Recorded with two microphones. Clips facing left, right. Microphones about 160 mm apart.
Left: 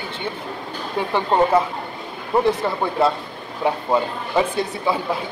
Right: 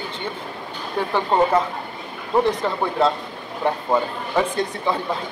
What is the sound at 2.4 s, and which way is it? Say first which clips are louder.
Speech: left 1 dB; 10° left (ahead or behind).